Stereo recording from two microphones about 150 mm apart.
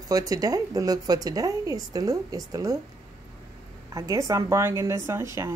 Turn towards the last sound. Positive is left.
turn(degrees=-20)  # may be behind; listen again after turning